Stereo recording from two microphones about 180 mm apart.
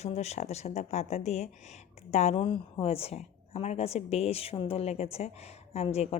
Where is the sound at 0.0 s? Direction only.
35° left (ahead or behind).